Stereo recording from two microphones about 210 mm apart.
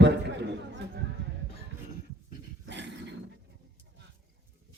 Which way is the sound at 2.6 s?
55° right (ahead or behind).